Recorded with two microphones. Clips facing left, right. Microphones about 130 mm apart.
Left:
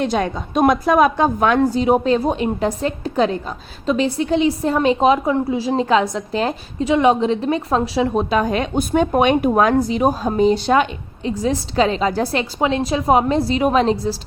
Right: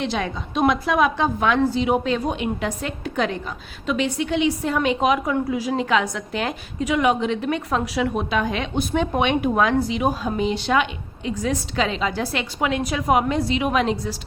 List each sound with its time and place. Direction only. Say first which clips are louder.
0.0 s a woman's voice: left 5 dB; 45° left (ahead or behind)
12.5 s a woman's voice: left 4 dB; 30° left (ahead or behind)